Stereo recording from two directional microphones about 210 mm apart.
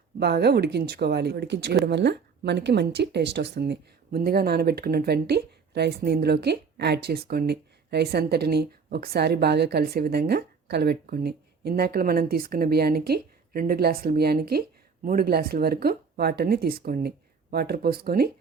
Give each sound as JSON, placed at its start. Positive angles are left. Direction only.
{"t": 0.2, "sound": "speech", "side_deg": -50}